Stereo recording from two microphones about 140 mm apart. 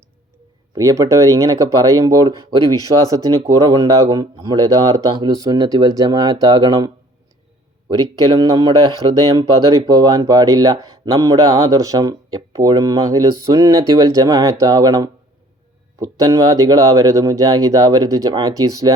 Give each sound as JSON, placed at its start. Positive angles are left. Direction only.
{"t": 0.8, "sound": "speech", "side_deg": -20}
{"t": 9.7, "sound": "speech", "side_deg": -25}